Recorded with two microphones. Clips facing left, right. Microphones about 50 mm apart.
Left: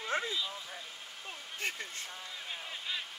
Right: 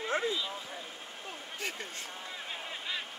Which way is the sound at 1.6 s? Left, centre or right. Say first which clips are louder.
Left 1 dB; left.